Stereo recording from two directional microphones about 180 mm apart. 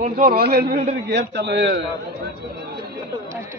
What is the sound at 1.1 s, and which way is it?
Speech, 75° right (ahead or behind).